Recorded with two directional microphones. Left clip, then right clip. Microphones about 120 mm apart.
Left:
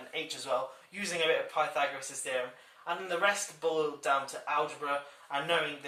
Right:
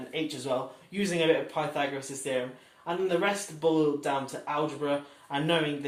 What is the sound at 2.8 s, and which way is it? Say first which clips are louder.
Speech: right 2 dB; 20° right (ahead or behind).